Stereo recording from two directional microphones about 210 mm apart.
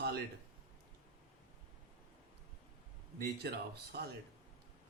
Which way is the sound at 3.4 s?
50° right (ahead or behind).